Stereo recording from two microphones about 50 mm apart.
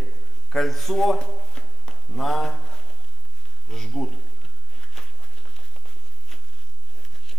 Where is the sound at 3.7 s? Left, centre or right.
Centre.